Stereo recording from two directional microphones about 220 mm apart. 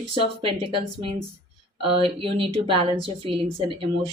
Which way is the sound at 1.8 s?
25° right (ahead or behind).